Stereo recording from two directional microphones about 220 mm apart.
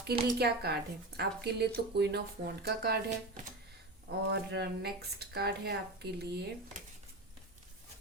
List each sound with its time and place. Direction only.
0.1 s speech: 45° right (ahead or behind)